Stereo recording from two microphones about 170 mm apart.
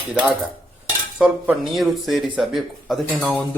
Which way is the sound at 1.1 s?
5° right (ahead or behind).